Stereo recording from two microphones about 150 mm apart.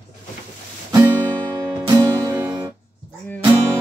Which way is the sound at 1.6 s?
20° right (ahead or behind).